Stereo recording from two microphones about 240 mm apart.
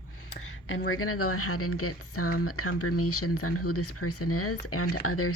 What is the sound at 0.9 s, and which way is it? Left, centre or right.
Speech, left.